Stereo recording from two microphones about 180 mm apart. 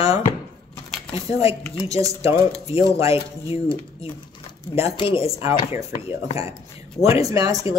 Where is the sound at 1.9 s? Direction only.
20° right (ahead or behind).